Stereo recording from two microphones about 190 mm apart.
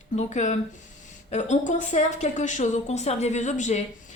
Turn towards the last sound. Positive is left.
turn(degrees=40)  # may be behind; listen again after turning